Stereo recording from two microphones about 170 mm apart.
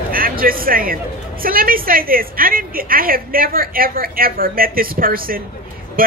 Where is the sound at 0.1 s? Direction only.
60° right (ahead or behind).